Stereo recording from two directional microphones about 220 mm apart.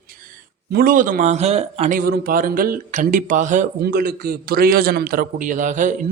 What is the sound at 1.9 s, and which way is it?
Speech, 45° right (ahead or behind).